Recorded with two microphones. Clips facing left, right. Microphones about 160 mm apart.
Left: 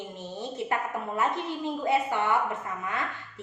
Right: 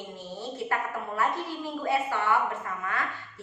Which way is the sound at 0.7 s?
20° left (ahead or behind).